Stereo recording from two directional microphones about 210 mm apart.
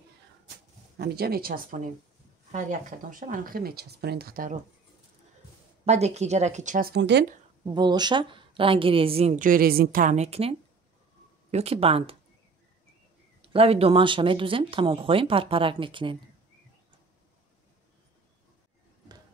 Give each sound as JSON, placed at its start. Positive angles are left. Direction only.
{"t": 0.9, "sound": "speech", "side_deg": -50}
{"t": 5.9, "sound": "speech", "side_deg": -30}
{"t": 7.6, "sound": "a woman's voice", "side_deg": -20}
{"t": 11.5, "sound": "a woman's voice", "side_deg": -30}
{"t": 13.4, "sound": "a woman's voice", "side_deg": -25}